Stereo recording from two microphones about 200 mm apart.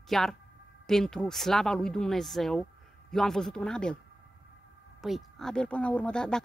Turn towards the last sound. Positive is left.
turn(degrees=5)  # may be behind; listen again after turning